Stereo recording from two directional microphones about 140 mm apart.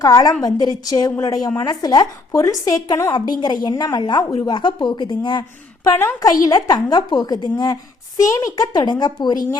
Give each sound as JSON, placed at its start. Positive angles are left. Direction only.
{"t": 0.0, "sound": "a woman's voice", "side_deg": 30}